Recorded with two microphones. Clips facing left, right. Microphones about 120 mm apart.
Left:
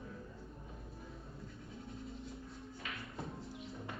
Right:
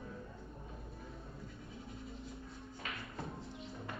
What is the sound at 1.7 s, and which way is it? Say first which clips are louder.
Pant: left 2 dB; centre (ahead or behind).